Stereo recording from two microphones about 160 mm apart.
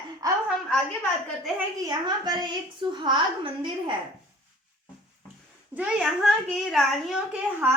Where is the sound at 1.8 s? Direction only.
25° right (ahead or behind).